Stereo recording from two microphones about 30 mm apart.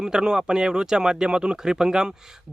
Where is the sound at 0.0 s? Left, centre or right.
Right.